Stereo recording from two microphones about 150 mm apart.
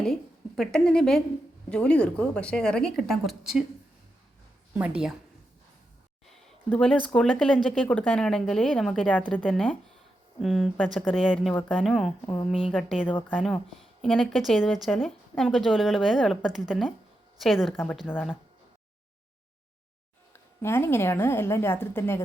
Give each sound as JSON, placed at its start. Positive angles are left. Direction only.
{"t": 0.0, "sound": "a woman's voice", "side_deg": 5}
{"t": 4.7, "sound": "a woman's voice", "side_deg": -10}
{"t": 6.3, "sound": "a sound", "side_deg": 5}
{"t": 7.1, "sound": "a woman's voice", "side_deg": 5}
{"t": 12.2, "sound": "speech", "side_deg": 10}
{"t": 12.5, "sound": "a woman's voice", "side_deg": -5}
{"t": 14.0, "sound": "a woman's voice", "side_deg": 0}
{"t": 20.3, "sound": "speech", "side_deg": 15}